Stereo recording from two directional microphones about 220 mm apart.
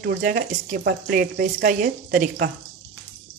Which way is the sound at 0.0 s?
40° right (ahead or behind).